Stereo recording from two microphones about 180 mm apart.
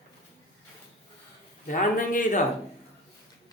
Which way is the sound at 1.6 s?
45° left (ahead or behind).